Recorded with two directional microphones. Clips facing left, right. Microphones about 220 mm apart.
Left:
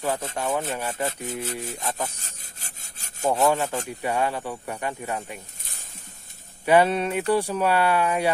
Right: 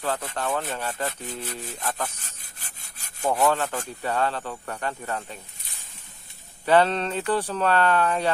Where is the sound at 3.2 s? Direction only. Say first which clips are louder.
Left 1 dB; 10° left (ahead or behind).